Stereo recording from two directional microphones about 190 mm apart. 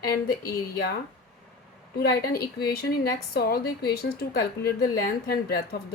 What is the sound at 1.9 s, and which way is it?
A woman's voice, 55° left (ahead or behind).